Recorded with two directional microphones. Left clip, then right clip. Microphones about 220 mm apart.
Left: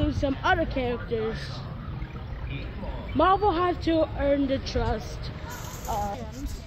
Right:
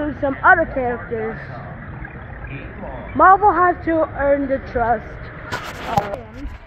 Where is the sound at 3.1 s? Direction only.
45° left (ahead or behind).